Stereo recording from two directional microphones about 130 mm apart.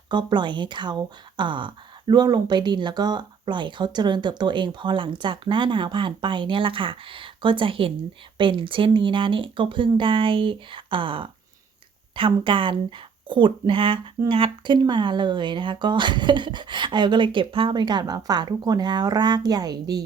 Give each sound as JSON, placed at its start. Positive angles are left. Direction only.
{"t": 0.1, "sound": "speech", "side_deg": -35}